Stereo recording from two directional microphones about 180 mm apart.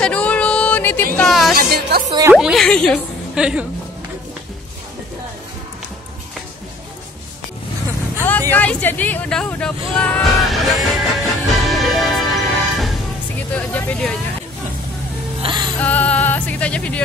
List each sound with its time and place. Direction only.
0.0 s music: 5° left (ahead or behind)
1.1 s a woman's voice: centre (ahead or behind)
1.5 s speech: 60° right (ahead or behind)
2.3 s a woman's voice: centre (ahead or behind)
8.2 s speech: 10° left (ahead or behind)
11.5 s music: centre (ahead or behind)
13.6 s speech: 10° left (ahead or behind)
15.4 s whimper: 25° right (ahead or behind)
15.8 s music: 10° left (ahead or behind)